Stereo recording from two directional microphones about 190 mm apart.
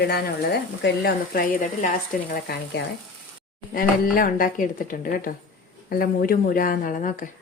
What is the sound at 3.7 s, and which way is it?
Speech, 50° left (ahead or behind).